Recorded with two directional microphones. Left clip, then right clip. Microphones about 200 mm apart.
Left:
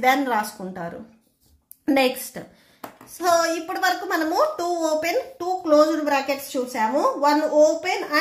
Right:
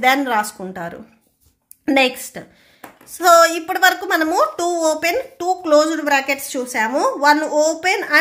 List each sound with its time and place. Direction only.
0.0 s a woman's voice: 30° right (ahead or behind)
3.2 s a woman's voice: 35° right (ahead or behind)